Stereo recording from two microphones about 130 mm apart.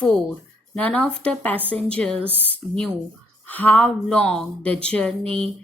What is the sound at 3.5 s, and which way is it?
Speech, 10° left (ahead or behind).